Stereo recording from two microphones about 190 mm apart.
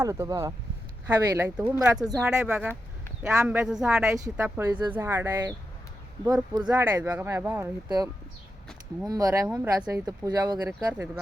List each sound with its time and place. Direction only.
0.0 s speech: 15° right (ahead or behind)
9.5 s speech: 10° right (ahead or behind)